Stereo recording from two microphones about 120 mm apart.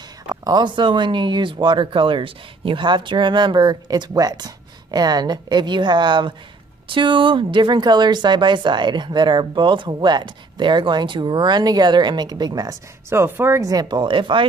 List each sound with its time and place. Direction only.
0.3 s speech: 35° right (ahead or behind)
13.1 s speech: 20° right (ahead or behind); by 14.4 s 45° right (ahead or behind)